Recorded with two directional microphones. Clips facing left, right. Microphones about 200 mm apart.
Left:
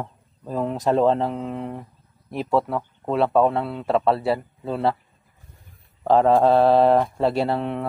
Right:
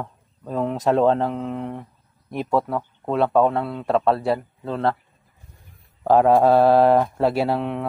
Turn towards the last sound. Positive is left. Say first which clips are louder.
# right 1 dB
turn(degrees=0)  # may be behind; listen again after turning